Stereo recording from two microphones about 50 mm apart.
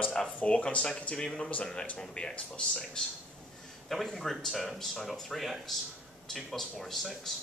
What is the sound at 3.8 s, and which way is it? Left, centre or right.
A man's voice, centre.